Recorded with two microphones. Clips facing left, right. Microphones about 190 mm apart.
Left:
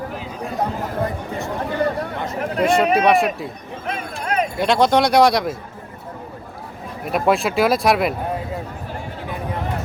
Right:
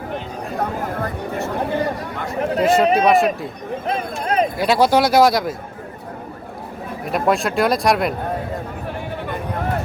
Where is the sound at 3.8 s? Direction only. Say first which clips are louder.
Right 2 dB; 30° right (ahead or behind).